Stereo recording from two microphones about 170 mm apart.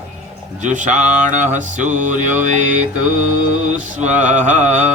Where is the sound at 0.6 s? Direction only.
45° right (ahead or behind).